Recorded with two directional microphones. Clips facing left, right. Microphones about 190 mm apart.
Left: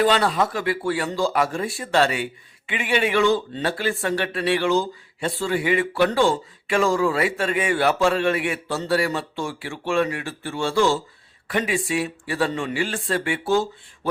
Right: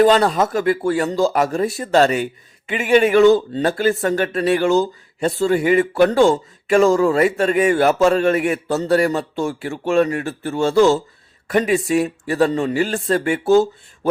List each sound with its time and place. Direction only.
0.0 s speech: 45° right (ahead or behind)